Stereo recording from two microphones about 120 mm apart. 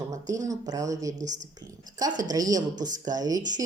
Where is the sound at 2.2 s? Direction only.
30° right (ahead or behind).